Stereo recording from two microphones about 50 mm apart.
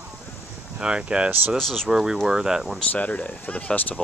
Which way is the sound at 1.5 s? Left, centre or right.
Centre.